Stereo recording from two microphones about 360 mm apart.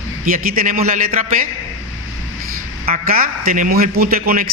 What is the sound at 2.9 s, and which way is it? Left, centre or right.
A man's voice, right.